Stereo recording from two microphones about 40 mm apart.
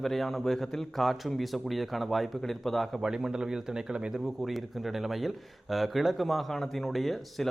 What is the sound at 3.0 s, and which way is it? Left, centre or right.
Speech, centre.